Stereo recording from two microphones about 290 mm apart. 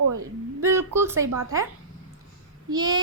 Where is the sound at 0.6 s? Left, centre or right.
Centre.